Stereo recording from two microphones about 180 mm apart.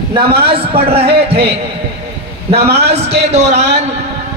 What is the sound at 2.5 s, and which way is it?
Speech, 65° right (ahead or behind).